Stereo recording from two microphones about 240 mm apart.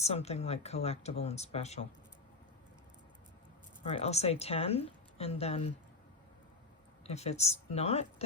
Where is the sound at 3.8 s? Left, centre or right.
Left.